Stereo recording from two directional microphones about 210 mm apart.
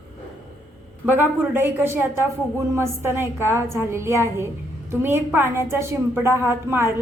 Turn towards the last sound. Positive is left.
turn(degrees=-10)  # may be behind; listen again after turning